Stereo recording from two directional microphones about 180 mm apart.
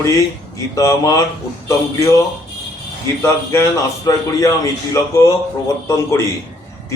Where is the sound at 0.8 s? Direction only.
20° left (ahead or behind).